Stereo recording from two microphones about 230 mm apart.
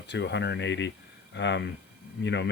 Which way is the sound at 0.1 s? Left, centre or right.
Left.